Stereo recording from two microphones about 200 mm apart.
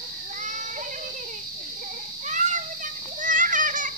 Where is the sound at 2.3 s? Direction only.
40° right (ahead or behind).